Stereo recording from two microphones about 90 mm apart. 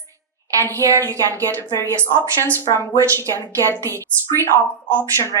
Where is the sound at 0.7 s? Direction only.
35° right (ahead or behind).